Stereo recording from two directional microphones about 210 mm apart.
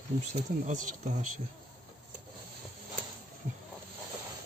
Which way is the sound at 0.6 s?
35° right (ahead or behind).